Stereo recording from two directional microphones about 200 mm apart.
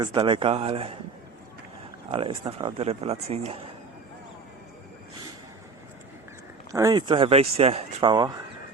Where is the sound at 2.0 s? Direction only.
25° right (ahead or behind).